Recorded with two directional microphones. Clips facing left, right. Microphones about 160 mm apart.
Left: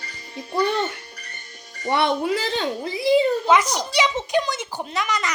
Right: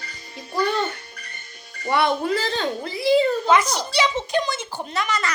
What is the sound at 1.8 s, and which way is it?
Speech, 25° left (ahead or behind).